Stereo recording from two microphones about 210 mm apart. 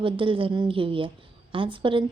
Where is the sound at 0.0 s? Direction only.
25° right (ahead or behind).